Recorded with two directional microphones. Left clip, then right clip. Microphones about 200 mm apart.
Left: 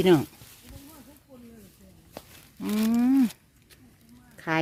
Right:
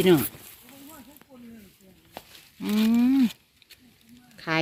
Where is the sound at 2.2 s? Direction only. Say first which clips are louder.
Right 1 dB; 50° left (ahead or behind).